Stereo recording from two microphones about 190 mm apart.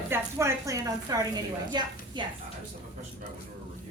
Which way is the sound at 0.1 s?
15° right (ahead or behind).